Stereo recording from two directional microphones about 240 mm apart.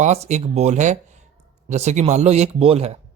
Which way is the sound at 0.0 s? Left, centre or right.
Right.